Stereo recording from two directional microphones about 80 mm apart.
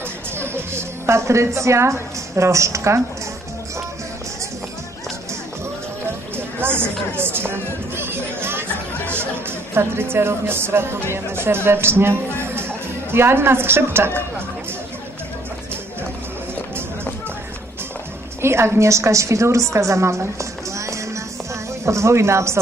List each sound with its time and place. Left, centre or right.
0.4 s a woman's voice: right
6.3 s a sound: right
7.2 s chatter: right
9.8 s speech: right
18.4 s a woman's voice: right